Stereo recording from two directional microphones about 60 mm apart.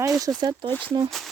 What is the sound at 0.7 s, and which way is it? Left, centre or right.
Speech, left.